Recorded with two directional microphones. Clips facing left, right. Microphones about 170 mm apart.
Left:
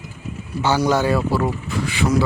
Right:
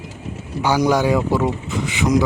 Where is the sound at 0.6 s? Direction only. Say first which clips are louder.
Right 1 dB; 10° right (ahead or behind).